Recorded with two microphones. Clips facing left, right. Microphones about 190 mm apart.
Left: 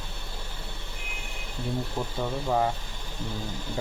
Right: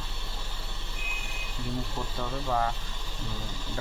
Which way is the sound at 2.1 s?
15° left (ahead or behind).